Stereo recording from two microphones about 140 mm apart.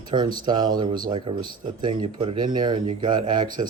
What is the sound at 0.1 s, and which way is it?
Speech, 35° right (ahead or behind).